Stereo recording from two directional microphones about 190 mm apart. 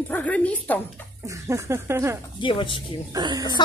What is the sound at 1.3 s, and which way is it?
Speech, 15° right (ahead or behind).